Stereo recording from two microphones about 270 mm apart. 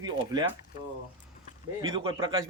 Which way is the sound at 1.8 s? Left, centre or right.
Centre.